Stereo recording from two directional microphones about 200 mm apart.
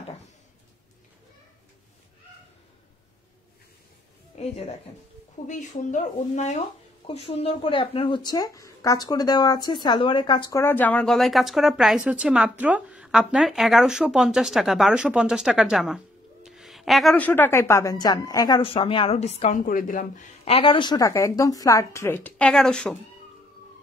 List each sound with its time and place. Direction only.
4.4 s speech: 30° left (ahead or behind)
10.6 s speech: 10° left (ahead or behind); by 20.2 s 45° left (ahead or behind)
20.4 s speech: 25° left (ahead or behind); by 22.9 s 5° left (ahead or behind)